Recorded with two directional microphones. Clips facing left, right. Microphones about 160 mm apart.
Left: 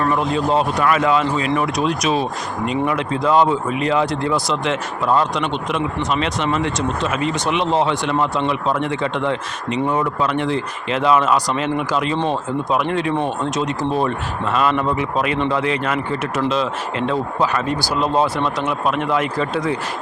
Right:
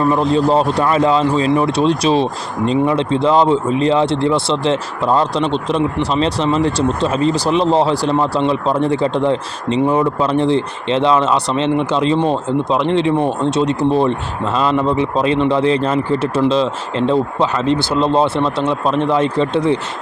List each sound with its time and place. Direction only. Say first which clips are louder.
0.2 s speech: right 4 dB; 35° right (ahead or behind)